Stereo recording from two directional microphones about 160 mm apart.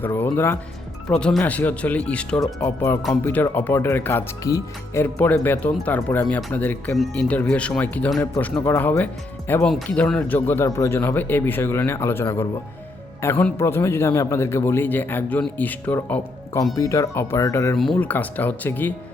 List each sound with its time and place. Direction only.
0.0 s a man's voice: 10° left (ahead or behind)
17.7 s a man's voice: 5° left (ahead or behind)